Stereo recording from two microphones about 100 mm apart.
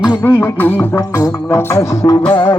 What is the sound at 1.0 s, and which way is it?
Music, 35° left (ahead or behind).